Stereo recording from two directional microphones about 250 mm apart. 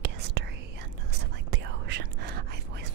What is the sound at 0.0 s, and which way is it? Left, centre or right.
Whispering, right.